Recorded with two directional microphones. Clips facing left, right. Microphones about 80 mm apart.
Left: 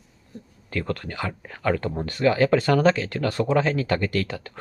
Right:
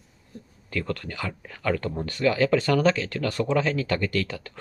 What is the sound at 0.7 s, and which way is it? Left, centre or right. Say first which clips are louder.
Speech: left 2 dB; left.